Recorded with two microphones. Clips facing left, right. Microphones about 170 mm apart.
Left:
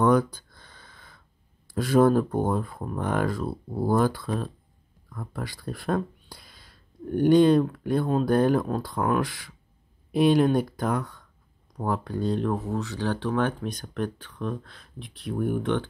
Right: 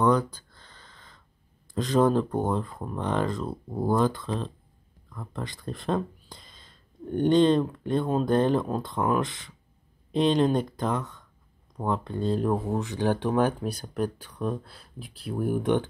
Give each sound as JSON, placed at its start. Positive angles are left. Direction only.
{"t": 0.3, "sound": "a sound", "side_deg": 10}
{"t": 1.7, "sound": "speech", "side_deg": 10}
{"t": 12.7, "sound": "speech", "side_deg": -15}